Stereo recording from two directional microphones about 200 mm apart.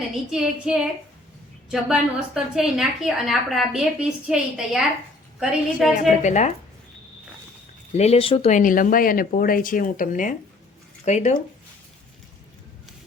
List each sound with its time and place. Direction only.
0.3 s a woman's voice: 5° right (ahead or behind)
5.9 s a woman's voice: 40° left (ahead or behind)
7.9 s speech: 30° left (ahead or behind)